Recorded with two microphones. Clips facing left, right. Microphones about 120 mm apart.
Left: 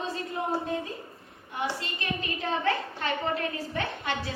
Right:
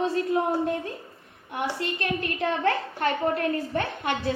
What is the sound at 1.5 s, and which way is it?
A woman's voice, 60° right (ahead or behind).